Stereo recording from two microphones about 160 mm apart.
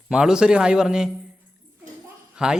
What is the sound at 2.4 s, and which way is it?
Speech, 5° right (ahead or behind).